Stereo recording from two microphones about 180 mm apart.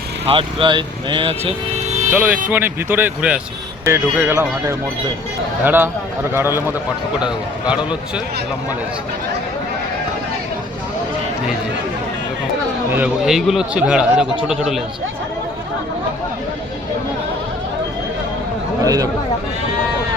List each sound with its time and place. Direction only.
0.3 s speech: 30° right (ahead or behind)
2.1 s speech: 5° right (ahead or behind)
12.9 s a man's voice: 5° right (ahead or behind)
18.8 s speech: 20° right (ahead or behind)